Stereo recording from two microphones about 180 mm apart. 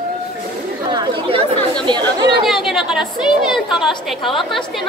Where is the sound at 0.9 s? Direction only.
30° right (ahead or behind).